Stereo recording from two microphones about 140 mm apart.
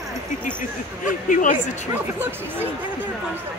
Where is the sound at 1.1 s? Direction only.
70° left (ahead or behind).